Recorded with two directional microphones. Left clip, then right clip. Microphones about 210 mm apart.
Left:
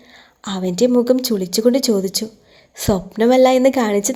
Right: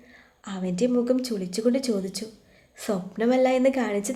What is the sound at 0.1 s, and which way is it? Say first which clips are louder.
Speech: left 11 dB; 30° left (ahead or behind).